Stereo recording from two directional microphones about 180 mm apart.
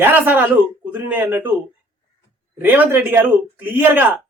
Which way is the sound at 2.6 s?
10° right (ahead or behind).